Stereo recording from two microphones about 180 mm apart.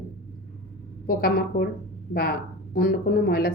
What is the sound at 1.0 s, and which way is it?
Speech, 55° left (ahead or behind).